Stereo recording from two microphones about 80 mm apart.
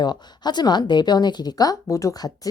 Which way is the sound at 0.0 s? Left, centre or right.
Left.